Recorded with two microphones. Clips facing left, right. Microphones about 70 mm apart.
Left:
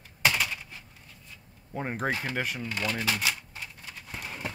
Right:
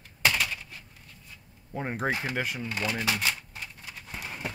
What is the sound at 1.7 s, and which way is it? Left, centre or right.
Speech, centre.